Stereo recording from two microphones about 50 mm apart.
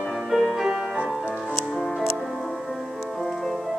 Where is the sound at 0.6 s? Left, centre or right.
Centre.